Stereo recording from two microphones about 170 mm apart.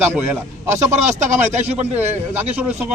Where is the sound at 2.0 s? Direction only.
10° right (ahead or behind).